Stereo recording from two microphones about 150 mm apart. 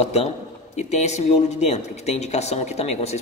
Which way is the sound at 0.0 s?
45° left (ahead or behind).